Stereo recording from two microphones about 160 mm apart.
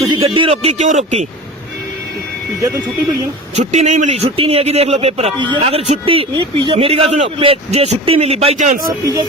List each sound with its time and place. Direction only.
0.1 s speech: 35° right (ahead or behind)
2.6 s speech: 20° right (ahead or behind)
3.5 s speech: 45° right (ahead or behind)
5.4 s speech: 30° right (ahead or behind); by 8.9 s 55° right (ahead or behind)